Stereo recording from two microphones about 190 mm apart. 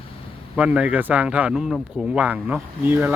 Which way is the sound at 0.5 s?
5° right (ahead or behind).